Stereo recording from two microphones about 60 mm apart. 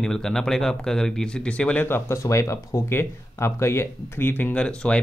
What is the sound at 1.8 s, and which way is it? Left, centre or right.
Speech, left.